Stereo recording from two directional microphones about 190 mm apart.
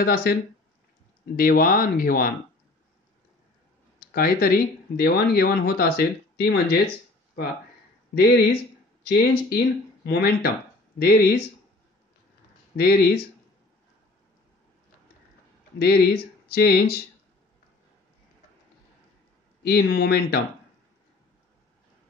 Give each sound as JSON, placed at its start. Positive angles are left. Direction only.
{"t": 0.0, "sound": "speech", "side_deg": 55}
{"t": 4.1, "sound": "speech", "side_deg": 50}
{"t": 8.1, "sound": "speech", "side_deg": 55}
{"t": 12.7, "sound": "speech", "side_deg": 55}
{"t": 15.8, "sound": "speech", "side_deg": 55}
{"t": 19.6, "sound": "speech", "side_deg": 55}